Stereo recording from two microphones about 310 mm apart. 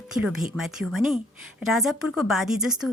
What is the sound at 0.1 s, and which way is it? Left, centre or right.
Speech, centre.